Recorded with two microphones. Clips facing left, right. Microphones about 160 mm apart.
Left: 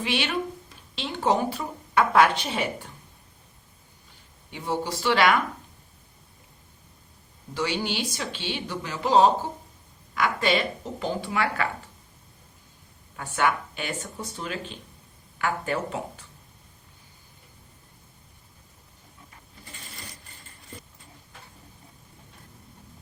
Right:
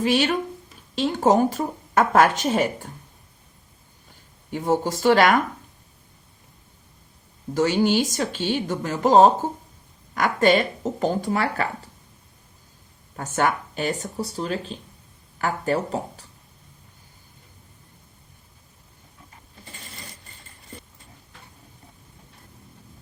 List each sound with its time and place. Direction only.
0.0 s speech: 40° right (ahead or behind)
4.5 s speech: 45° right (ahead or behind)
7.5 s speech: 45° right (ahead or behind)
13.1 s speech: 40° right (ahead or behind)